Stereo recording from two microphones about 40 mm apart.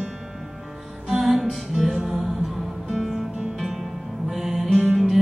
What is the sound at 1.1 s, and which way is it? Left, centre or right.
Music, centre.